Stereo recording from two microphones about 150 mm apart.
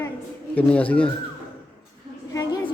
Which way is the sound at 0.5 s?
10° left (ahead or behind).